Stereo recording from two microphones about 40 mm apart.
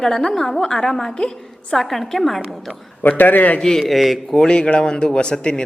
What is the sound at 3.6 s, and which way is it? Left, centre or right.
Speech, centre.